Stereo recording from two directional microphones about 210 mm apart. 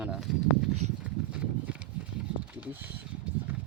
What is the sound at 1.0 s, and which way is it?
Clip-clop, 5° right (ahead or behind).